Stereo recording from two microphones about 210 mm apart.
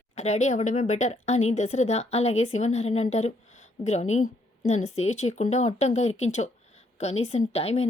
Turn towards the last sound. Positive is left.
turn(degrees=30)  # may be behind; listen again after turning